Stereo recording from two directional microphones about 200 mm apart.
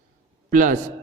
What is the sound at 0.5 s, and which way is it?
Speech, 40° right (ahead or behind).